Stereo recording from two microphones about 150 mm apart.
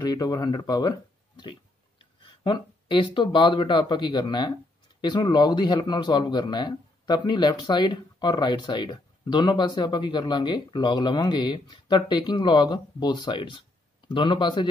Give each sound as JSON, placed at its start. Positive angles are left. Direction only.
{"t": 0.0, "sound": "speech", "side_deg": 25}